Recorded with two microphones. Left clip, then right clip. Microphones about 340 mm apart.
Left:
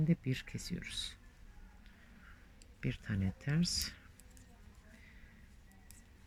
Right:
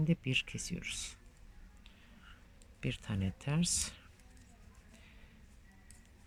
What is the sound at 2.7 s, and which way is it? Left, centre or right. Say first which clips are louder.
Speech: right 1 dB; centre.